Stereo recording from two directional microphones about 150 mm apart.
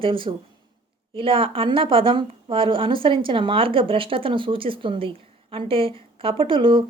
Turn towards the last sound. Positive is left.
turn(degrees=-35)  # may be behind; listen again after turning